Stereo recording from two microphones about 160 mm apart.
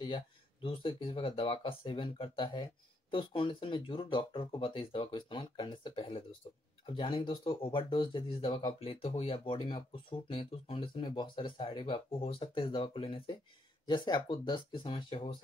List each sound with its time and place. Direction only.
0.0 s speech: 30° left (ahead or behind)